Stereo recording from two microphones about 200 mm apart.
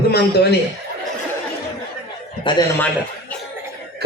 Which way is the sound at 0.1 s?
55° left (ahead or behind).